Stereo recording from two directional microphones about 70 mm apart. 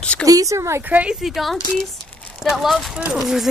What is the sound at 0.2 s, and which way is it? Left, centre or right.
Speech, right.